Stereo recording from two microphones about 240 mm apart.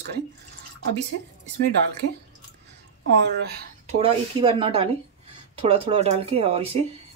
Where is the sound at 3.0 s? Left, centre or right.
Right.